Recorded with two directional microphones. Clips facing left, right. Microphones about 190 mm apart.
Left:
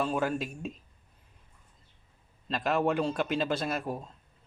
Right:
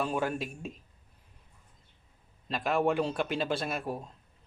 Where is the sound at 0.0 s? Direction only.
5° right (ahead or behind).